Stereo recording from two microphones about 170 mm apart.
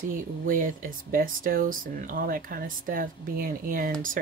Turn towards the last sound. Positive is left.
turn(degrees=-55)  # may be behind; listen again after turning